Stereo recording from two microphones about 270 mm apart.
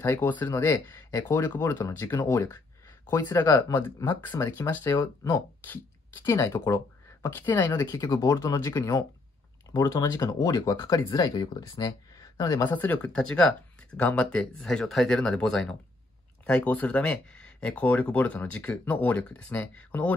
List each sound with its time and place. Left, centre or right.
0.0 s speech: centre